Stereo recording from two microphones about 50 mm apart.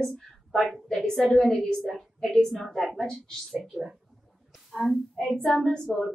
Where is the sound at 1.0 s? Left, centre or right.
Centre.